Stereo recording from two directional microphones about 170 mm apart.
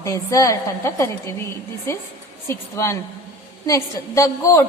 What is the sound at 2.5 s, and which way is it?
A woman's voice, 15° left (ahead or behind).